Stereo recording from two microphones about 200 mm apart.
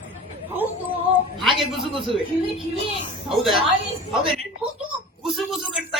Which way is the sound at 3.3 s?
Centre (ahead or behind).